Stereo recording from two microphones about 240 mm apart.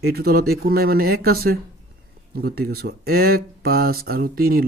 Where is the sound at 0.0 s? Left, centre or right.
Right.